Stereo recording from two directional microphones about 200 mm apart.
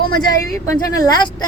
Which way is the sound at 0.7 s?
20° left (ahead or behind).